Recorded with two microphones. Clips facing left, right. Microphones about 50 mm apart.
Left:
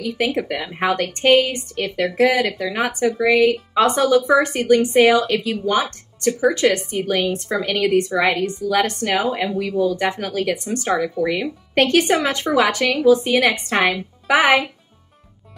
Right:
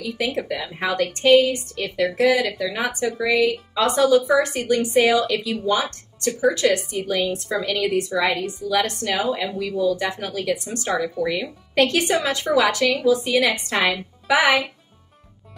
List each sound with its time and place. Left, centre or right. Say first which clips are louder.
0.4 s speech: left 3 dB; left
8.2 s a woman's voice: left 3 dB; left